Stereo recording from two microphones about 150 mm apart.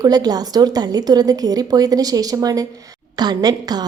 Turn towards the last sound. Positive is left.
turn(degrees=-25)  # may be behind; listen again after turning